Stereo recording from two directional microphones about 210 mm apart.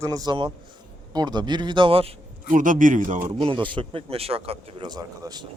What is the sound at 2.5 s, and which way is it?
Speech, 40° right (ahead or behind).